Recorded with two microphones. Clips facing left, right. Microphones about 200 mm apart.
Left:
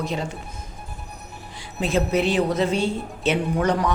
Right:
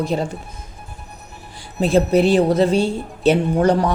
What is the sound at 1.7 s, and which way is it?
Speech, 35° right (ahead or behind).